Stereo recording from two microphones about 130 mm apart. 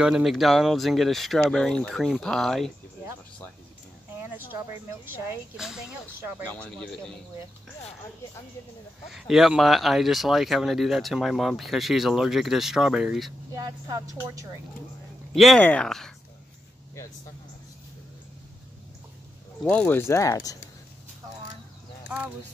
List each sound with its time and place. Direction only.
0.0 s speech: 5° right (ahead or behind)
5.0 s speech: 15° right (ahead or behind)
5.6 s speech: 5° right (ahead or behind)
6.4 s speech: 10° left (ahead or behind)
9.1 s speech: 5° right (ahead or behind)
13.5 s a woman's voice: 30° right (ahead or behind)
15.3 s speech: centre (ahead or behind)
19.6 s speech: 10° left (ahead or behind); by 20.5 s 25° left (ahead or behind)